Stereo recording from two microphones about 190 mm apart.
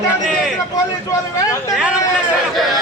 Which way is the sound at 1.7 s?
5° right (ahead or behind).